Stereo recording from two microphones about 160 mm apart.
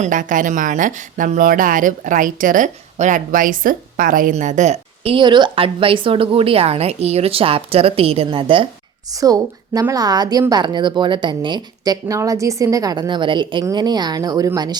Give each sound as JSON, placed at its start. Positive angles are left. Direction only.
{"t": 0.0, "sound": "a woman's voice", "side_deg": -55}